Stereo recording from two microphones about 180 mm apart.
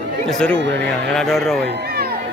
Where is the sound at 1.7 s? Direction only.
55° right (ahead or behind).